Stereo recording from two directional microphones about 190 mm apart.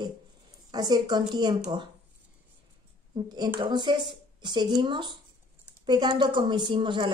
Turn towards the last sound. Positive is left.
turn(degrees=-25)  # may be behind; listen again after turning